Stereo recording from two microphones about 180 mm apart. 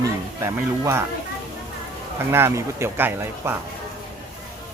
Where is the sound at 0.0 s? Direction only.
15° right (ahead or behind).